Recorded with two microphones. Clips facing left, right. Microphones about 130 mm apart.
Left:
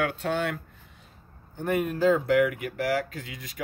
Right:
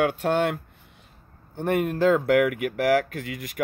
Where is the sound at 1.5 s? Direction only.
65° right (ahead or behind).